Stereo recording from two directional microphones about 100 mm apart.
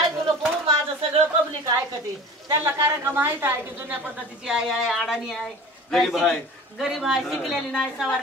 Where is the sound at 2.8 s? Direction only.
20° right (ahead or behind).